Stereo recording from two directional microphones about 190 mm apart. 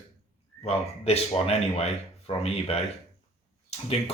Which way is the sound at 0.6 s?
35° left (ahead or behind).